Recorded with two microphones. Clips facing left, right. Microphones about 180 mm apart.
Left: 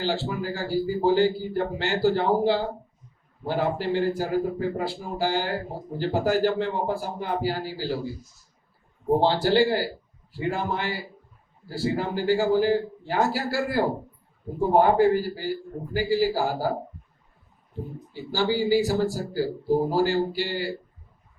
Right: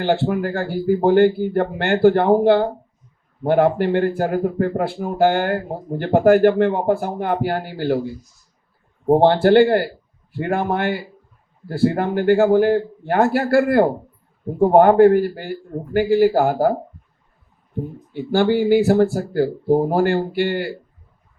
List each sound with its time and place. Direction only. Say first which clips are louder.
0.0 s a man's voice: right 8 dB; 60° right (ahead or behind)
18.1 s a man's voice: right 8 dB; 60° right (ahead or behind)